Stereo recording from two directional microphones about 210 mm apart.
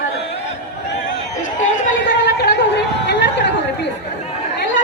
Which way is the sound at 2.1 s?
55° left (ahead or behind).